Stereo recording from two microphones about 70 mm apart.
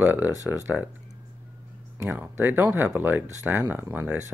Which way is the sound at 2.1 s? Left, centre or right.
Right.